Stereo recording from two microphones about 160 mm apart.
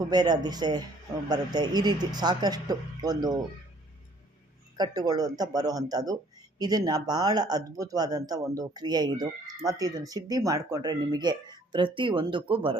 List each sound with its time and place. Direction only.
0.0 s speech: 25° right (ahead or behind)
4.8 s speech: 25° right (ahead or behind)